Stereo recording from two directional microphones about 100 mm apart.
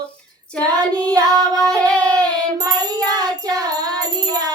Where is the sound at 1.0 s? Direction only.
40° right (ahead or behind).